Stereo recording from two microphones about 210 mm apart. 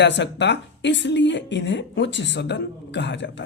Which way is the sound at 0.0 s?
55° left (ahead or behind).